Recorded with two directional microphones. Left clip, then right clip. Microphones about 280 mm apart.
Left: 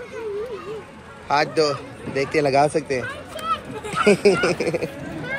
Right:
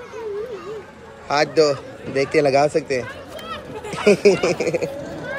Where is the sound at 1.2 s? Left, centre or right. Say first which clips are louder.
Right 2 dB; centre.